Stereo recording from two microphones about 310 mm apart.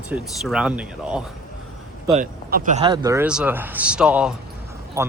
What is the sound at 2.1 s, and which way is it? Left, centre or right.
Speech, right.